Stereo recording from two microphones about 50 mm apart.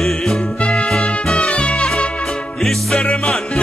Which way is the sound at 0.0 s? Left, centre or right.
Centre.